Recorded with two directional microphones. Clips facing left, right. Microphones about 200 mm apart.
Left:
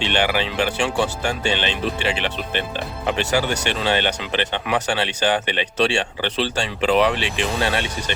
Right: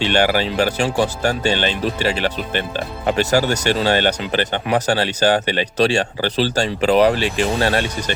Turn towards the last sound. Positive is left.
turn(degrees=-40)  # may be behind; listen again after turning